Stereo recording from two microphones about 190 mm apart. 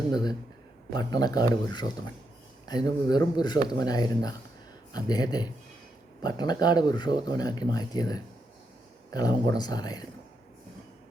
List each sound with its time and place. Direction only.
0.1 s speech: 20° left (ahead or behind)